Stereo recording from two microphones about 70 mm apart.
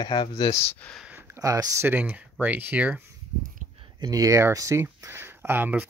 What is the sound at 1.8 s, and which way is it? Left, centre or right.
Speech, right.